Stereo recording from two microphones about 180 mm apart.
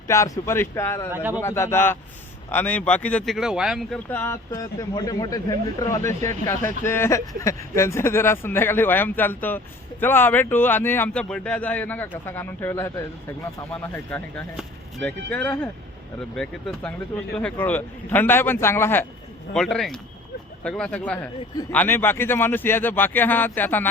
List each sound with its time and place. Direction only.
0.1 s speech: 15° left (ahead or behind)
1.1 s a man's voice: 10° right (ahead or behind)
1.4 s speech: 15° left (ahead or behind)
19.5 s speech: centre (ahead or behind)